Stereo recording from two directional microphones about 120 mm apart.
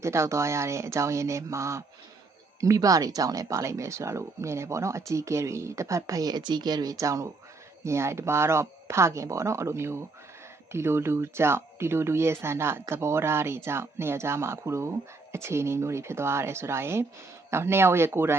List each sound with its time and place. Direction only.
0.0 s speech: 25° right (ahead or behind)